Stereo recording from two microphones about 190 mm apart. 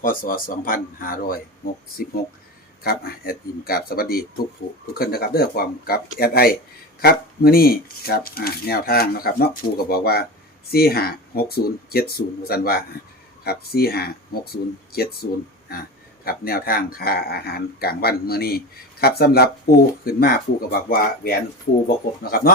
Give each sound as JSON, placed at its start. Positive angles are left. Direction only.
{"t": 0.0, "sound": "speech", "side_deg": 50}